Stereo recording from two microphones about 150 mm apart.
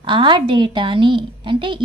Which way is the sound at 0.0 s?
35° right (ahead or behind).